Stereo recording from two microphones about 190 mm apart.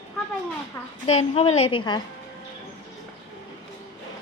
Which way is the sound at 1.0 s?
35° left (ahead or behind).